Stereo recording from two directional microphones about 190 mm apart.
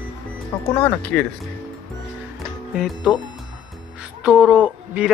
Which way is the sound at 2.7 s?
5° right (ahead or behind).